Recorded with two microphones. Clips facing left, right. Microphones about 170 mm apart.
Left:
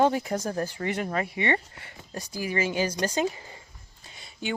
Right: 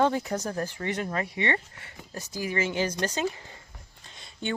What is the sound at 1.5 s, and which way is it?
Speech, 35° left (ahead or behind).